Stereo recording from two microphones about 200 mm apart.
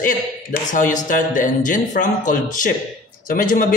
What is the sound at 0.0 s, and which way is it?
A man's voice, 40° left (ahead or behind).